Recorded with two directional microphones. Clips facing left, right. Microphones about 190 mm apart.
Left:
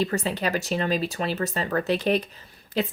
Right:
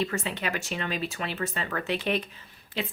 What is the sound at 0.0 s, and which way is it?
A woman's voice, 40° left (ahead or behind).